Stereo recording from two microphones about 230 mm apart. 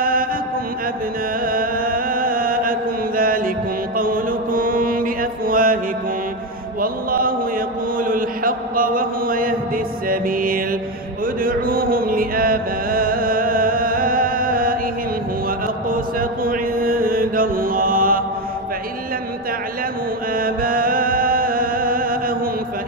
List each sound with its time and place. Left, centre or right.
0.0 s mantra: right
1.4 s chant: right
6.8 s mantra: right
10.0 s music: right
11.4 s chant: right
15.6 s mantra: right
20.3 s mantra: right